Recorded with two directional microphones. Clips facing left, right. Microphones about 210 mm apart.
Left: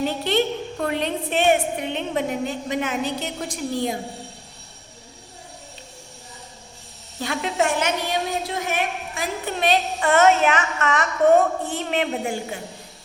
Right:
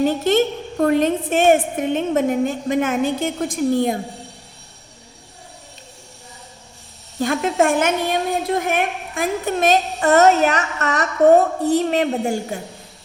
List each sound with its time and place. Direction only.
0.0 s a woman's voice: 45° right (ahead or behind)
7.2 s a woman's voice: 50° right (ahead or behind)